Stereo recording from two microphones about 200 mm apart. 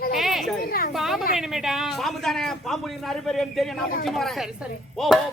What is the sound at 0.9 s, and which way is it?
Speech, centre (ahead or behind).